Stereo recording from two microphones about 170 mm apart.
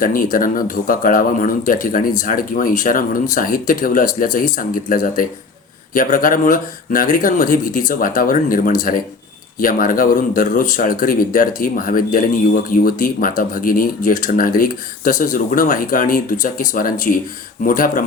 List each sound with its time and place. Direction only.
0.0 s speech: 55° left (ahead or behind)